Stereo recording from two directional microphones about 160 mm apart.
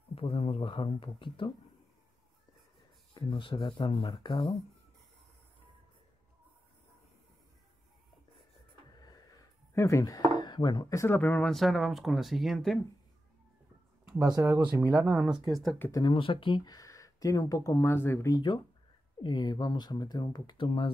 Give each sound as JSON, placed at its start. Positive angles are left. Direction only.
{"t": 0.1, "sound": "speech", "side_deg": 35}
{"t": 3.2, "sound": "speech", "side_deg": 30}
{"t": 9.0, "sound": "speech", "side_deg": 25}
{"t": 14.2, "sound": "speech", "side_deg": -20}
{"t": 15.8, "sound": "speech", "side_deg": 25}